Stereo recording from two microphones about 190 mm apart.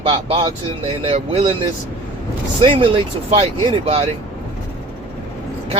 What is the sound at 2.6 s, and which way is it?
Speech, 30° right (ahead or behind).